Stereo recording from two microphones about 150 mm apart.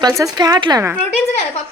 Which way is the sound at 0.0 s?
20° right (ahead or behind).